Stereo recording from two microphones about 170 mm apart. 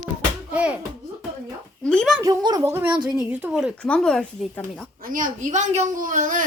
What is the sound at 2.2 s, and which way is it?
A woman's voice, 20° right (ahead or behind).